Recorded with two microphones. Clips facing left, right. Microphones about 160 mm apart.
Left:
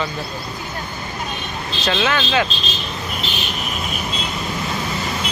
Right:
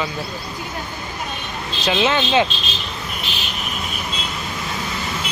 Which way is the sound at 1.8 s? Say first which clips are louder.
Right 2 dB; 20° right (ahead or behind).